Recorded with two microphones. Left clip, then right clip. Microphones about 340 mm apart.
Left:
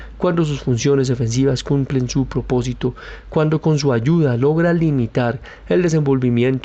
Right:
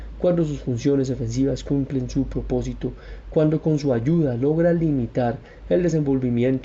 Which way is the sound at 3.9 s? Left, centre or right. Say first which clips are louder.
Left 4 dB; left.